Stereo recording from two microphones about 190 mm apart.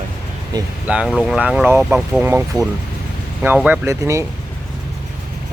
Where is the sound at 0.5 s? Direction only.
20° right (ahead or behind).